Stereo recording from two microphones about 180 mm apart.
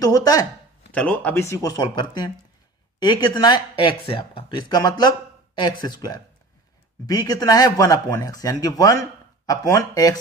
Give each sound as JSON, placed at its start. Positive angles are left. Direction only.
{"t": 0.0, "sound": "speech", "side_deg": 20}
{"t": 0.9, "sound": "speech", "side_deg": 5}